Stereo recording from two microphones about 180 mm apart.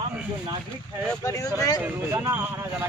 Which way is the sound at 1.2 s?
20° left (ahead or behind).